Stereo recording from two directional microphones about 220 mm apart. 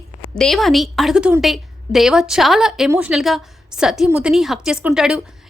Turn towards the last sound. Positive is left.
turn(degrees=-5)  # may be behind; listen again after turning